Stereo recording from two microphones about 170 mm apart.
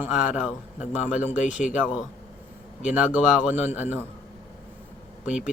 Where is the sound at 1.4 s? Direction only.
45° left (ahead or behind).